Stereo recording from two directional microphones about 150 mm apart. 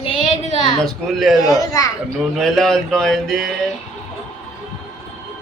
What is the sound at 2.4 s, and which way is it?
Speech, 5° left (ahead or behind).